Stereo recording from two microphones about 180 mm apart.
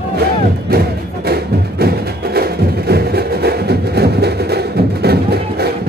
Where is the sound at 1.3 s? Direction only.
60° right (ahead or behind).